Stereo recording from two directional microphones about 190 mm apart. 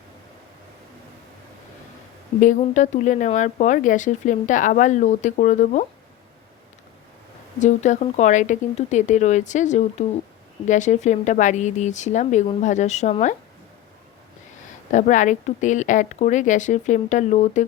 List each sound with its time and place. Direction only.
2.4 s speech: 40° left (ahead or behind)
7.6 s speech: 40° left (ahead or behind)
14.8 s speech: 40° left (ahead or behind)